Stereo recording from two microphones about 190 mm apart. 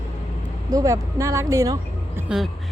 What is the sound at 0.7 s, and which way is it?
Speech, 15° right (ahead or behind).